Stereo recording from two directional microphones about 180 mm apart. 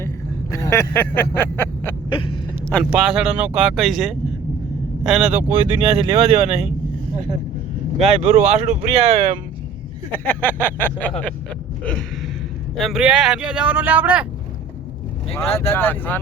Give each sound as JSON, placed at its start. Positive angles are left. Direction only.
{"t": 0.5, "sound": "speech", "side_deg": 15}
{"t": 2.0, "sound": "a sound", "side_deg": 30}
{"t": 2.9, "sound": "speech", "side_deg": -5}
{"t": 5.9, "sound": "speech", "side_deg": -30}
{"t": 7.9, "sound": "speech", "side_deg": -35}
{"t": 10.2, "sound": "speech", "side_deg": 10}
{"t": 15.7, "sound": "speech", "side_deg": 10}